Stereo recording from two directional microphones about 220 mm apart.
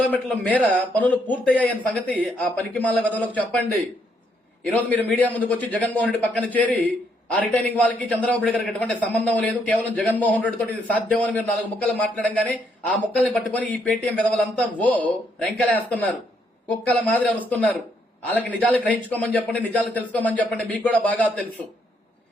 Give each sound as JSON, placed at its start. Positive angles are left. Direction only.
{"t": 0.1, "sound": "a man's voice", "side_deg": 5}